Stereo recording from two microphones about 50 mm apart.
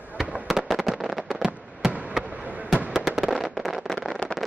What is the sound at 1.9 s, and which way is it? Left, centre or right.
Fireworks, right.